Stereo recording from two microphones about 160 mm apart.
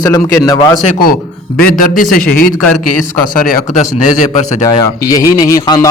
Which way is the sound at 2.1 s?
65° left (ahead or behind).